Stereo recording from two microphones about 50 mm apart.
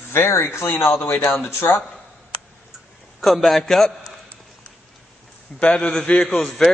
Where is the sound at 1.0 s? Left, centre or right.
Left.